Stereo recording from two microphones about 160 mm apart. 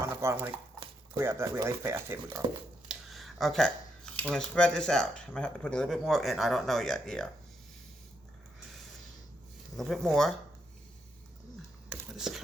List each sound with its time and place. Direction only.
0.0 s a sound: 15° right (ahead or behind)
1.1 s speech: 15° right (ahead or behind)
2.9 s speech: centre (ahead or behind)
9.7 s speech: centre (ahead or behind)
11.9 s whispering: 5° right (ahead or behind)